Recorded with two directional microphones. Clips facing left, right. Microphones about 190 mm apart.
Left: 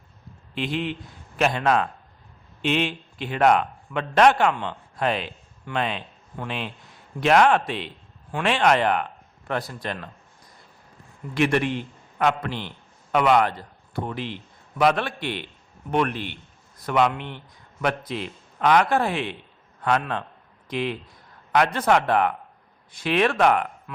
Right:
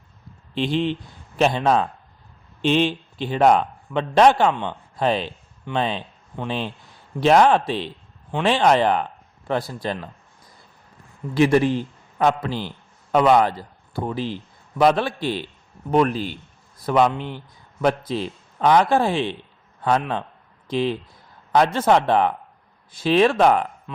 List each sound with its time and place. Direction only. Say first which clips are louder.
0.5 s a man's voice: right 5 dB; 30° right (ahead or behind)
11.3 s a man's voice: right 5 dB; 35° right (ahead or behind)